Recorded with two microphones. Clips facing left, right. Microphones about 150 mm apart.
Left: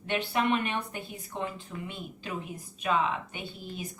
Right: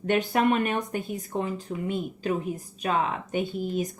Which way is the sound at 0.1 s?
45° right (ahead or behind).